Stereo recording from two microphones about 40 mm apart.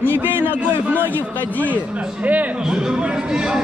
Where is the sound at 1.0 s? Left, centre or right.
Left.